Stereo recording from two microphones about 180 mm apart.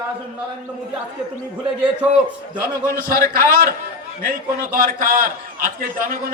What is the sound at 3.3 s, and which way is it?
A man's voice, 55° right (ahead or behind).